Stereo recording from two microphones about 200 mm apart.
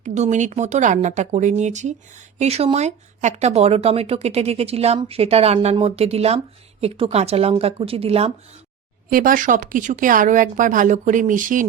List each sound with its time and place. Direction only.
0.0 s a woman's voice: 35° right (ahead or behind)
9.0 s speech: 45° right (ahead or behind)